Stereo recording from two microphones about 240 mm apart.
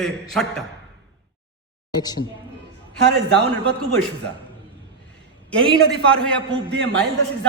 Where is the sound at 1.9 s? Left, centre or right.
Centre.